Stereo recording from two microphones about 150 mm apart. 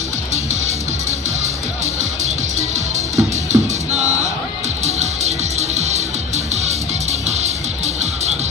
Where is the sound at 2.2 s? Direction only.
50° right (ahead or behind).